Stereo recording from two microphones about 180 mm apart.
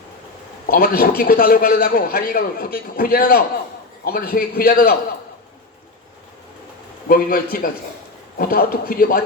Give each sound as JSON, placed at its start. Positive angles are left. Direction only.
{"t": 0.7, "sound": "a man's voice", "side_deg": 55}
{"t": 7.1, "sound": "a man's voice", "side_deg": 55}